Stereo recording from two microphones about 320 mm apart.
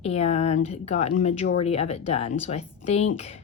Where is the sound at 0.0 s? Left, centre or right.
Centre.